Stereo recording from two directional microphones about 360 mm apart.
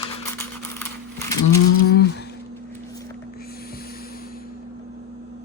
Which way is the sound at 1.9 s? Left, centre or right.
Left.